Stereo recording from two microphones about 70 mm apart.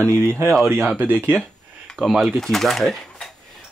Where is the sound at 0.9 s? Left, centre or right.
Right.